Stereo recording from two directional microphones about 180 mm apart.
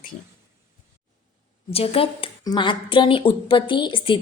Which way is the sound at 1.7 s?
30° left (ahead or behind).